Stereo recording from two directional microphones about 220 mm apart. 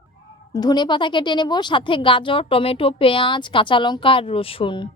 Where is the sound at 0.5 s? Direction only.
20° left (ahead or behind).